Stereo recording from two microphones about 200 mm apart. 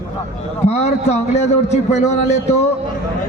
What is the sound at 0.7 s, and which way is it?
A man's voice, 35° left (ahead or behind).